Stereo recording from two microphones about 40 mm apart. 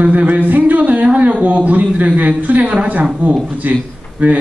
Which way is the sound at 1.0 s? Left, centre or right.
Right.